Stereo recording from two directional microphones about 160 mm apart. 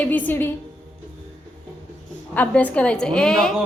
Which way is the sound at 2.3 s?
10° left (ahead or behind).